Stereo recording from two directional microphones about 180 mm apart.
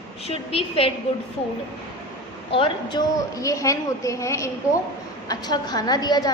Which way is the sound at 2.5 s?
30° left (ahead or behind).